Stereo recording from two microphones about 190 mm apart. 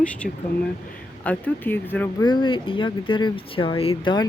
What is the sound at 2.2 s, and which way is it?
Speech, 25° left (ahead or behind).